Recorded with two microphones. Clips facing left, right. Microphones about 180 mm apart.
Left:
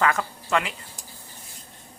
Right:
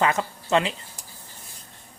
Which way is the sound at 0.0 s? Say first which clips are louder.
Right 1 dB; 20° right (ahead or behind).